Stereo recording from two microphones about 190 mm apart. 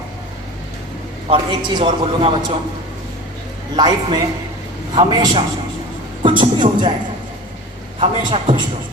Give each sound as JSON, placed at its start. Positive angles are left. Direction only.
{"t": 1.3, "sound": "a man's voice", "side_deg": -25}
{"t": 3.8, "sound": "a man's voice", "side_deg": -20}
{"t": 7.9, "sound": "a man's voice", "side_deg": -30}